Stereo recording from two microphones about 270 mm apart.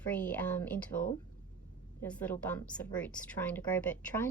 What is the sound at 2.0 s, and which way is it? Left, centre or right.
A woman's voice, centre.